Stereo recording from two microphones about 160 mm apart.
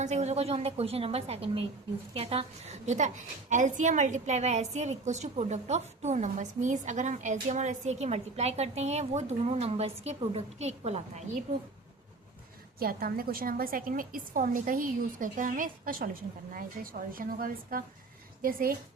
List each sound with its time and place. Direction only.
0.0 s a woman's voice: 45° right (ahead or behind)
12.8 s a woman's voice: 70° right (ahead or behind)